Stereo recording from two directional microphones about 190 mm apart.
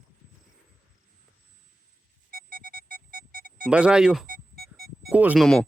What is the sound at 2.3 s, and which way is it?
Music, 50° right (ahead or behind).